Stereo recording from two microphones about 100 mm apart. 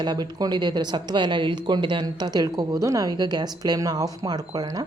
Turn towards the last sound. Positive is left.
turn(degrees=-40)  # may be behind; listen again after turning